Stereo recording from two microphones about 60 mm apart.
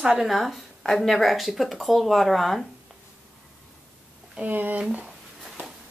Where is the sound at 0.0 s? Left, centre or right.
Centre.